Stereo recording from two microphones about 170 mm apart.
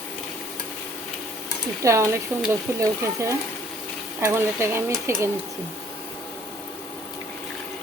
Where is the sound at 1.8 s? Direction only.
15° right (ahead or behind).